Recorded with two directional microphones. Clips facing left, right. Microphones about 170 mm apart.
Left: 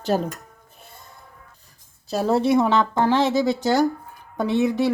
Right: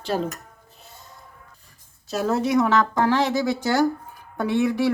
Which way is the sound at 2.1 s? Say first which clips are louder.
Left 2 dB; 30° left (ahead or behind).